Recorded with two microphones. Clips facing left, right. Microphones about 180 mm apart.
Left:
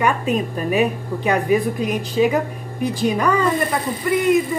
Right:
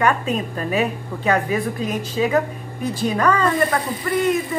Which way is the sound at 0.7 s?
15° left (ahead or behind).